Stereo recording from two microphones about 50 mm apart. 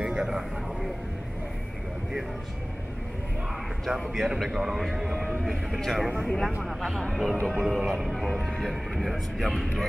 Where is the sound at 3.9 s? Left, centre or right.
Centre.